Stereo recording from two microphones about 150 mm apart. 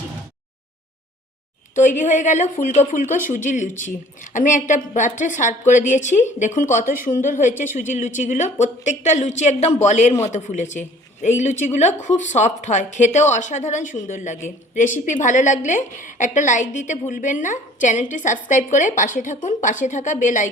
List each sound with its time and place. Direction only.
1.7 s a woman's voice: 55° left (ahead or behind)